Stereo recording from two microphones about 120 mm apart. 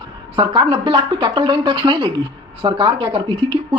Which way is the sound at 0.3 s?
45° right (ahead or behind).